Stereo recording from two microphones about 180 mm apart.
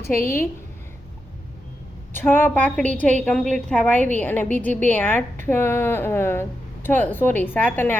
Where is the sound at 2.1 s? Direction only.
10° left (ahead or behind).